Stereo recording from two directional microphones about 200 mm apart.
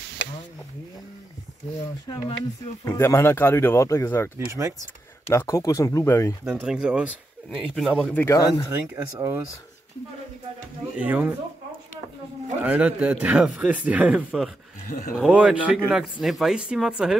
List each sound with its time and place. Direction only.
0.2 s a sound: 70° left (ahead or behind)
2.0 s speech: 20° left (ahead or behind)
4.5 s a man's voice: 15° right (ahead or behind)
5.3 s speech: 15° left (ahead or behind)
6.4 s speech: 5° right (ahead or behind)
8.2 s speech: 15° left (ahead or behind)
8.9 s a man's voice: 15° right (ahead or behind)
11.0 s a man's voice: 5° right (ahead or behind)
12.6 s a man's voice: 10° right (ahead or behind)
14.9 s speech: 45° left (ahead or behind)
15.1 s speech: 5° right (ahead or behind)